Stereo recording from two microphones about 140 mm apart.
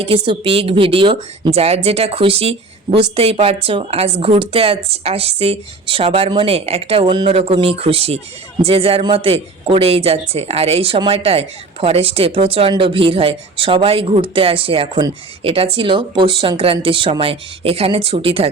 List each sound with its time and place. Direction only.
0.0 s a woman's voice: 40° right (ahead or behind)